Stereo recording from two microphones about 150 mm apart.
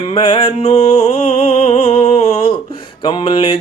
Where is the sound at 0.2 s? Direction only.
35° left (ahead or behind).